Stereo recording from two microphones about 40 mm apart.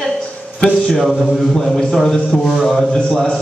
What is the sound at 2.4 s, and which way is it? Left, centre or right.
Speech, centre.